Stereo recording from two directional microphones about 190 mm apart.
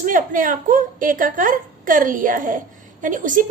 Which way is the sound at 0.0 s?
45° right (ahead or behind).